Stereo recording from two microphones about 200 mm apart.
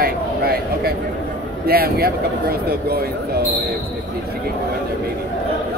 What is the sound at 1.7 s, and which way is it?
Speech, 50° right (ahead or behind).